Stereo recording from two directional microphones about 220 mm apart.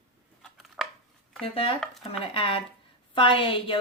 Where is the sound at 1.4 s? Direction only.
25° left (ahead or behind).